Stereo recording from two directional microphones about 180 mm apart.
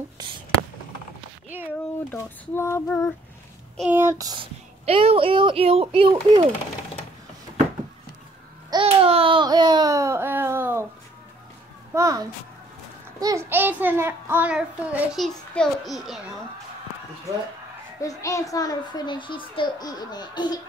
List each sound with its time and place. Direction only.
1.5 s child singing: 10° right (ahead or behind)
2.0 s speech: 15° left (ahead or behind)
3.9 s speech: 15° right (ahead or behind)
8.6 s babbling: 30° right (ahead or behind); by 10.9 s 15° right (ahead or behind)
11.9 s child singing: 20° right (ahead or behind); by 16.2 s centre (ahead or behind)
18.0 s a child's voice: 20° left (ahead or behind)